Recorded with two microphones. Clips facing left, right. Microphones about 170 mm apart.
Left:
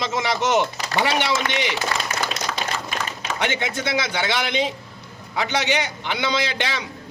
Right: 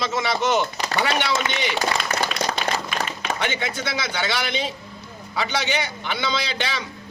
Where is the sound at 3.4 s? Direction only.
20° left (ahead or behind).